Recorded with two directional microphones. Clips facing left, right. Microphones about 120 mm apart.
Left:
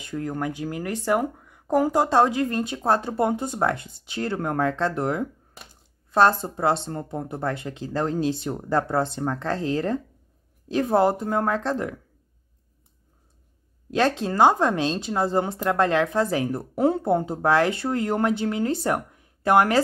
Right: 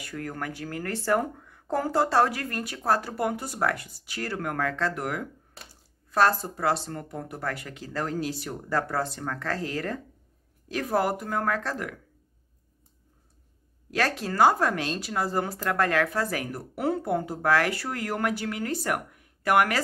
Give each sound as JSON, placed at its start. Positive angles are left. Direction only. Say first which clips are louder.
{"t": 0.0, "sound": "speech", "louder": "left 6 dB", "side_deg": 20}
{"t": 13.8, "sound": "speech", "louder": "left 5 dB", "side_deg": 25}